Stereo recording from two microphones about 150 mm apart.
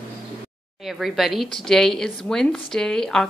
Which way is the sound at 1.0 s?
Centre (ahead or behind).